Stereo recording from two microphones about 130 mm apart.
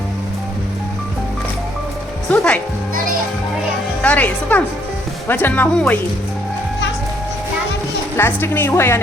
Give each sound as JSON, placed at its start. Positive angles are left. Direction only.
{"t": 2.3, "sound": "speech", "side_deg": 10}
{"t": 4.0, "sound": "speech", "side_deg": 10}
{"t": 8.1, "sound": "speech", "side_deg": 15}